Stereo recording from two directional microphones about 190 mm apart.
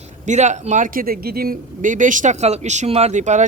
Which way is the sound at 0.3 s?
40° right (ahead or behind).